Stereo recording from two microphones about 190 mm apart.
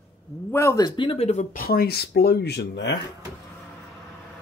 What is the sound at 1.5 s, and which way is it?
Speech, 50° left (ahead or behind).